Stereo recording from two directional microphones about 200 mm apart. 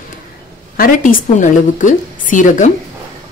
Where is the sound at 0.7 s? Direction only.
40° left (ahead or behind).